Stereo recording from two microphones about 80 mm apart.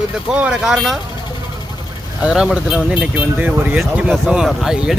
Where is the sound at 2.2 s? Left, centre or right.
Centre.